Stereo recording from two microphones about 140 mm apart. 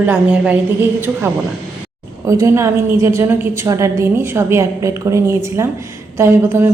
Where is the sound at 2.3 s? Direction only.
20° right (ahead or behind).